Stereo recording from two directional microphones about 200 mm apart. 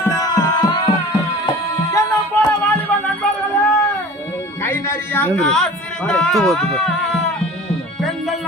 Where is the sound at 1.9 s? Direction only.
15° left (ahead or behind).